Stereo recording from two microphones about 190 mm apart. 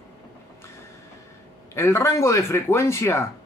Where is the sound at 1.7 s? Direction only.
15° left (ahead or behind).